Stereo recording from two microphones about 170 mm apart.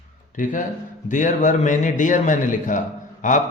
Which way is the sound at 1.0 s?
50° left (ahead or behind).